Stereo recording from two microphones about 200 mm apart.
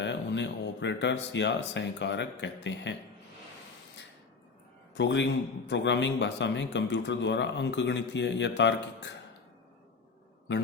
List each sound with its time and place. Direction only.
0.0 s speech: 65° left (ahead or behind)
4.9 s a man's voice: 60° left (ahead or behind)